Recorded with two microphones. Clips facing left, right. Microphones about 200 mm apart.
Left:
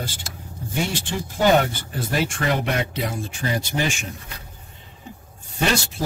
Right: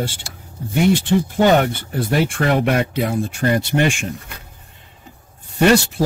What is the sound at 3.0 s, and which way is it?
Speech, 60° right (ahead or behind).